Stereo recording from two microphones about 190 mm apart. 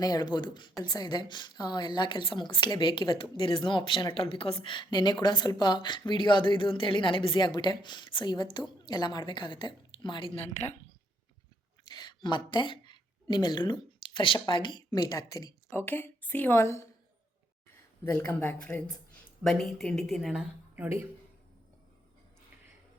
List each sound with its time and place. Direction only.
0.0 s a woman's voice: 20° left (ahead or behind)
11.9 s speech: 20° left (ahead or behind)
18.0 s speech: 10° left (ahead or behind); by 21.0 s 10° right (ahead or behind)